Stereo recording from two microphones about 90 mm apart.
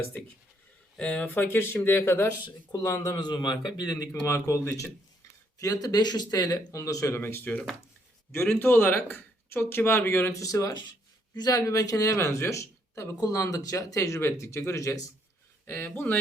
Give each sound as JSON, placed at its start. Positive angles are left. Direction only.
{"t": 0.9, "sound": "speech", "side_deg": 10}
{"t": 1.3, "sound": "speech", "side_deg": 25}
{"t": 3.2, "sound": "speech", "side_deg": 55}
{"t": 4.1, "sound": "speech", "side_deg": 30}
{"t": 5.5, "sound": "speech", "side_deg": 40}
{"t": 6.8, "sound": "speech", "side_deg": 35}
{"t": 10.4, "sound": "speech", "side_deg": 40}
{"t": 15.6, "sound": "speech", "side_deg": 20}